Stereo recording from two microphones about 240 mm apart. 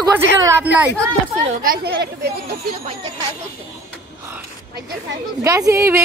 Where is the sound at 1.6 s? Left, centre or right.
Right.